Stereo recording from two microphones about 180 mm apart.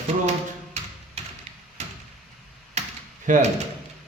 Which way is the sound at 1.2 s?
35° right (ahead or behind).